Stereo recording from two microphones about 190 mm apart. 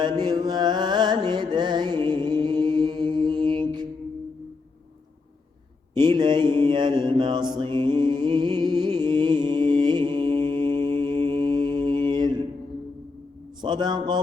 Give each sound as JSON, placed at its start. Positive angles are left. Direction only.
{"t": 0.0, "sound": "music", "side_deg": -20}
{"t": 5.9, "sound": "mantra", "side_deg": -20}
{"t": 13.6, "sound": "a man's voice", "side_deg": -25}